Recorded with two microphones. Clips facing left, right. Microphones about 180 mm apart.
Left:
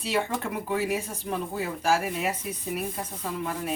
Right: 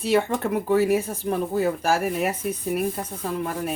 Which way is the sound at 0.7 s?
45° right (ahead or behind).